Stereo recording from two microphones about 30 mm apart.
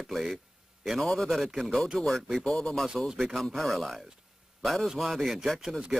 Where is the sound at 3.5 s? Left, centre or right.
Centre.